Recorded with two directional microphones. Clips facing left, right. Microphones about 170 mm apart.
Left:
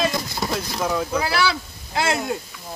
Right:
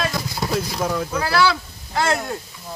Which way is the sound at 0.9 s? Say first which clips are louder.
Left 1 dB; 5° left (ahead or behind).